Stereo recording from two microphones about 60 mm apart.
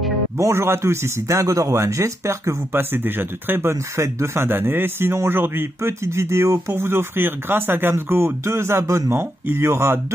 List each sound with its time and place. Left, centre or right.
0.4 s speech: right
1.2 s speech: right
2.7 s speech: right
3.7 s speech: right
9.1 s speech: right